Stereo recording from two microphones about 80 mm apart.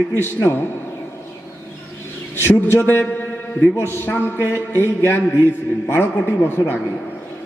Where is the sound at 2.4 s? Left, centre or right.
Left.